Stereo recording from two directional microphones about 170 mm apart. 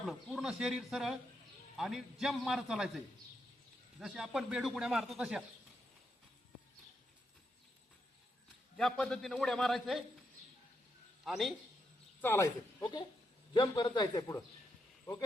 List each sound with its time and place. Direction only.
0.0 s speech: centre (ahead or behind)
4.0 s speech: 5° right (ahead or behind)
8.7 s speech: 5° left (ahead or behind)
11.3 s speech: centre (ahead or behind)
12.2 s speech: 15° left (ahead or behind)
12.8 s a man's voice: 25° left (ahead or behind)